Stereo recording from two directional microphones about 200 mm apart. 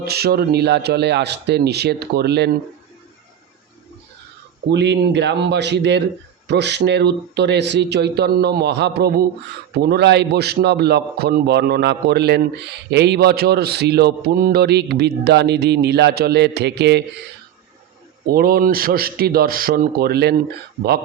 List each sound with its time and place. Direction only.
0.0 s a man's voice: 55° right (ahead or behind)
4.7 s a man's voice: 60° right (ahead or behind)
18.3 s a man's voice: 50° right (ahead or behind)